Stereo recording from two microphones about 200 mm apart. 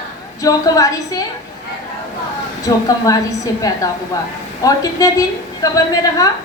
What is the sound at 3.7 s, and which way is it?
A woman's voice, 20° left (ahead or behind).